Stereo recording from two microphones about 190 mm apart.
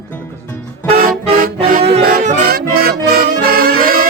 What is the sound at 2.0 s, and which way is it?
Music, 45° right (ahead or behind).